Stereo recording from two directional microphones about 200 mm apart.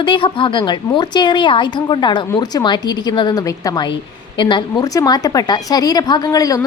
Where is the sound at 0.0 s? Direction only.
25° left (ahead or behind).